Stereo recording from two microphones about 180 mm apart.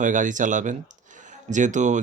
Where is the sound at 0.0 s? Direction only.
45° right (ahead or behind).